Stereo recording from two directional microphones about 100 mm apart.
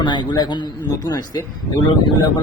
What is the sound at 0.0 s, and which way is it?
Speech, 50° left (ahead or behind).